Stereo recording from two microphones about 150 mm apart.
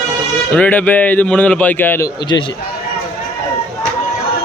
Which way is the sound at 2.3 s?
30° left (ahead or behind).